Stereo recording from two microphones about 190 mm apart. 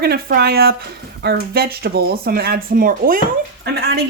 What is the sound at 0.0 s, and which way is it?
Speech, 55° right (ahead or behind).